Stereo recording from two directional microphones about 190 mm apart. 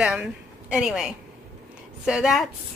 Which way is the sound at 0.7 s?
Centre (ahead or behind).